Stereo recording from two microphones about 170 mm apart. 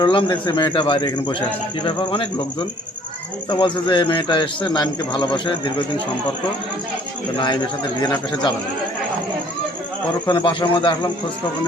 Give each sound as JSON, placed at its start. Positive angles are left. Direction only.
{"t": 0.0, "sound": "a man's voice", "side_deg": 30}
{"t": 3.5, "sound": "a man's voice", "side_deg": 30}
{"t": 7.3, "sound": "a man's voice", "side_deg": 25}
{"t": 10.2, "sound": "a man's voice", "side_deg": 25}